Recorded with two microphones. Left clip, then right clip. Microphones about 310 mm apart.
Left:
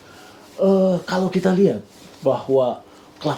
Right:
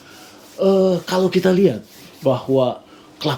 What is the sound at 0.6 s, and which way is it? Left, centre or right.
Speech, right.